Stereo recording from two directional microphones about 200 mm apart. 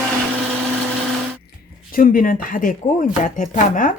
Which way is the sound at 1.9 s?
45° left (ahead or behind).